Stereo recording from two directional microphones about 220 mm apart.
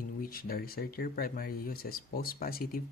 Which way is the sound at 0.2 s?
40° left (ahead or behind).